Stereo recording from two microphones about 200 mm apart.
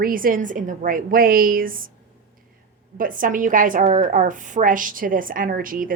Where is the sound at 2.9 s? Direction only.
40° right (ahead or behind).